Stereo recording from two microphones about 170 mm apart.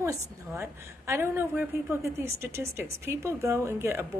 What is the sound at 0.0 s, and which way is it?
A woman's voice, 15° right (ahead or behind).